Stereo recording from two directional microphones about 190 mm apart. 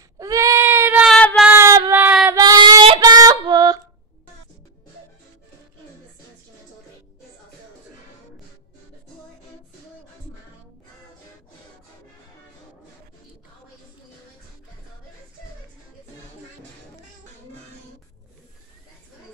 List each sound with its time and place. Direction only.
0.2 s sheep: 15° right (ahead or behind)
1.1 s child singing: 5° left (ahead or behind)
1.5 s child singing: 15° right (ahead or behind)
2.3 s female singing: 20° right (ahead or behind)